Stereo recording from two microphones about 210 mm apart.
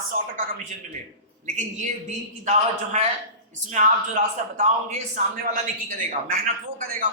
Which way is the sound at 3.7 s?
35° right (ahead or behind).